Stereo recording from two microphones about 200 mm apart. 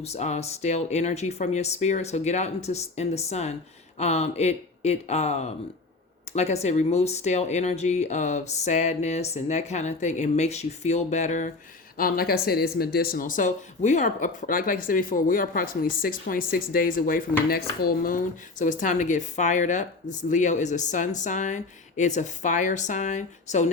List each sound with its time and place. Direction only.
0.0 s speech: 35° left (ahead or behind)